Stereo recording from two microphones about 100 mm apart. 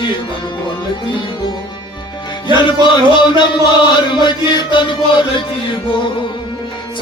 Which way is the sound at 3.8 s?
50° left (ahead or behind).